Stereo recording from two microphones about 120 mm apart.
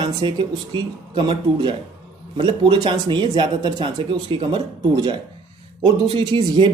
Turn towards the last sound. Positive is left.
turn(degrees=-45)  # may be behind; listen again after turning